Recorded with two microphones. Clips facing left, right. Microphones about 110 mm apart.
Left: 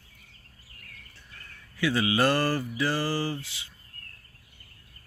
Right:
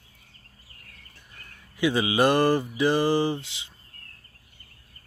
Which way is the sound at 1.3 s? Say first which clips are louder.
Right 1 dB; 15° right (ahead or behind).